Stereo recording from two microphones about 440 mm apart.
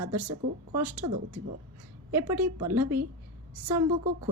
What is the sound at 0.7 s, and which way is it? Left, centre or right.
Speech, centre.